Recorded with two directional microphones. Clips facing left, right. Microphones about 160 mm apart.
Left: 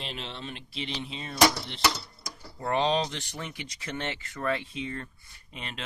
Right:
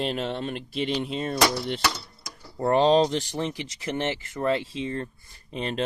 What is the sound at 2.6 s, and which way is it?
Speech, 40° right (ahead or behind).